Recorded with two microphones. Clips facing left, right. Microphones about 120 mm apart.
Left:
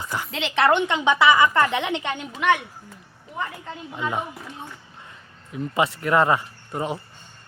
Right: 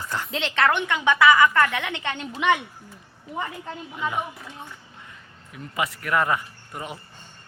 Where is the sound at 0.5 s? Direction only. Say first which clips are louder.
Left 4 dB; 15° left (ahead or behind); by 2.6 s centre (ahead or behind).